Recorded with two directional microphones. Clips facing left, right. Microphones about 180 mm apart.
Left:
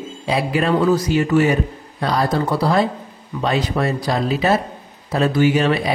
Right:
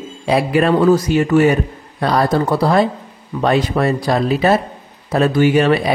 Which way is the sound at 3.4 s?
55° right (ahead or behind).